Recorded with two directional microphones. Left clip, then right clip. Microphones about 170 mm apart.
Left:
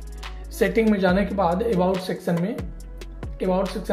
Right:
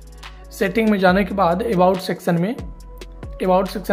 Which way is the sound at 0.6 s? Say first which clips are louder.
Right 1 dB; 30° right (ahead or behind).